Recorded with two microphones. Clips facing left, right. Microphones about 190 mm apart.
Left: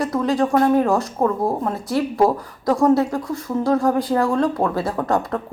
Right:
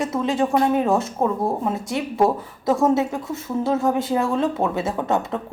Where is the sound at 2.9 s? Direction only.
20° right (ahead or behind).